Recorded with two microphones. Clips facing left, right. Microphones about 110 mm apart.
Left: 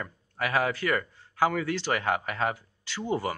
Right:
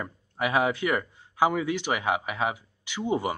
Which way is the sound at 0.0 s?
20° right (ahead or behind).